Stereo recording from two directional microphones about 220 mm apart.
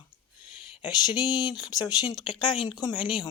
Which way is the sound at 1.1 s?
20° left (ahead or behind).